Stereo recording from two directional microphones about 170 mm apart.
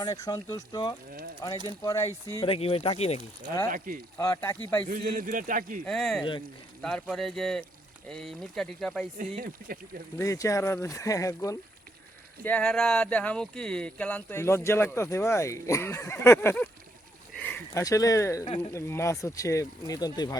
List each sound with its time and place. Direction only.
0.0 s speech: 20° left (ahead or behind)
2.4 s speech: 35° left (ahead or behind)
3.7 s speech: 55° right (ahead or behind)
4.2 s speech: 15° left (ahead or behind)
4.9 s a man's voice: 55° right (ahead or behind)
5.8 s speech: 5° left (ahead or behind)
9.1 s a man's voice: 50° right (ahead or behind)
10.2 s speech: 20° left (ahead or behind)
12.5 s speech: 5° left (ahead or behind)
18.4 s speech: 30° left (ahead or behind)
18.7 s speech: 15° left (ahead or behind)